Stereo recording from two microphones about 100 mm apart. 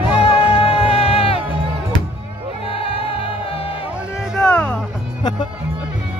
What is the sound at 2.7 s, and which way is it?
Music, 70° left (ahead or behind).